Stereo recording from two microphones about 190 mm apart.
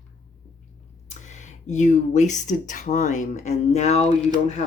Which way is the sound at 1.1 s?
40° left (ahead or behind).